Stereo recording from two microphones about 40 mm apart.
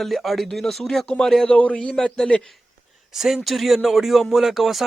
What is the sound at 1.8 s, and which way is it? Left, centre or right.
Speech, centre.